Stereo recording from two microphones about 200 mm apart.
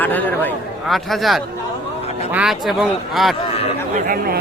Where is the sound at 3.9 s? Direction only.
45° right (ahead or behind).